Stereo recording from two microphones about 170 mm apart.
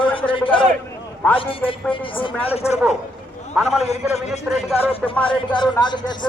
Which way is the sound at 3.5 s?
Centre (ahead or behind).